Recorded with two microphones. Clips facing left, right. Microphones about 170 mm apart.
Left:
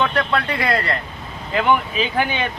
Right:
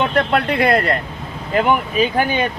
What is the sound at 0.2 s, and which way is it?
Speech, 55° right (ahead or behind).